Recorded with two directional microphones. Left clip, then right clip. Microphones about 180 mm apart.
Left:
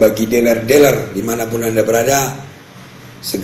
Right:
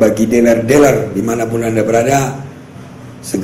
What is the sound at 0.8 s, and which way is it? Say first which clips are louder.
A man's voice: right 2 dB; 35° left (ahead or behind).